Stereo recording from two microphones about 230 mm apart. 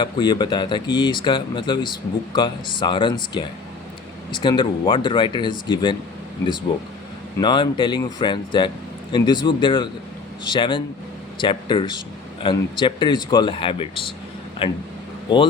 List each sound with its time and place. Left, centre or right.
0.0 s speech: centre
7.3 s speech: centre